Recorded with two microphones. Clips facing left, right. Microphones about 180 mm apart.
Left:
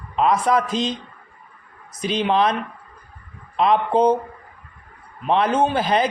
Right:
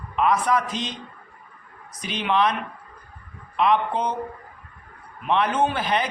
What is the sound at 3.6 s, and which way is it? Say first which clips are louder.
Speech: left 4 dB; 35° left (ahead or behind).